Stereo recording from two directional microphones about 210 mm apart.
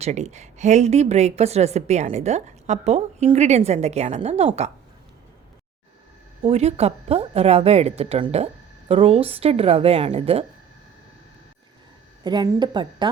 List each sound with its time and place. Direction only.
0.0 s a woman's voice: 30° right (ahead or behind)
6.4 s speech: 30° right (ahead or behind)
12.2 s speech: 20° right (ahead or behind)